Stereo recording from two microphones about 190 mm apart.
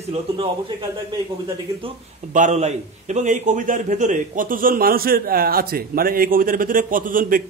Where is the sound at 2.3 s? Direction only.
40° right (ahead or behind).